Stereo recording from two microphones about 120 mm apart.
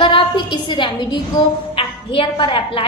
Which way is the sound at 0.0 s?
45° left (ahead or behind).